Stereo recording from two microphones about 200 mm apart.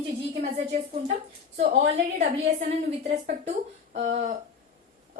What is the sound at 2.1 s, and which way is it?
A woman's voice, 35° right (ahead or behind).